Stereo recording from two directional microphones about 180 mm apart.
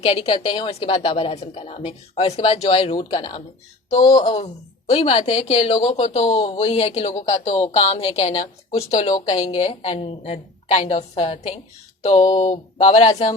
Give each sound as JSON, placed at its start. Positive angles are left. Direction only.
{"t": 0.0, "sound": "a woman's voice", "side_deg": 35}
{"t": 3.8, "sound": "a woman's voice", "side_deg": 40}